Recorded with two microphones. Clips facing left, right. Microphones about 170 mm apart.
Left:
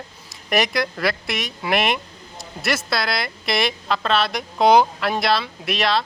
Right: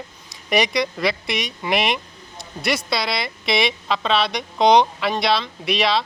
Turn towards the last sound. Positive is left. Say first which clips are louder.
# right 1 dB
turn(degrees=0)  # may be behind; listen again after turning